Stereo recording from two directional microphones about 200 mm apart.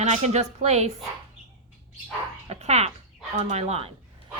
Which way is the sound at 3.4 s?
35° right (ahead or behind).